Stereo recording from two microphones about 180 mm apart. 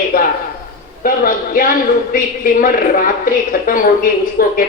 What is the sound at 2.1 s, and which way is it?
A woman's voice, 50° left (ahead or behind).